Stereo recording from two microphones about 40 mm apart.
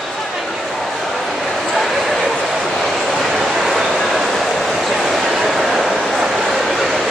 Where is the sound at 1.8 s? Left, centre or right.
Centre.